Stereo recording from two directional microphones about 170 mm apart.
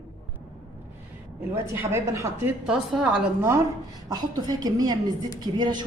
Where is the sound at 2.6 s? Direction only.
5° right (ahead or behind).